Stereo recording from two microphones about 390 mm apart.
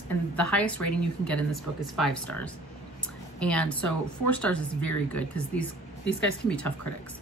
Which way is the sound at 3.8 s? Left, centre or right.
Left.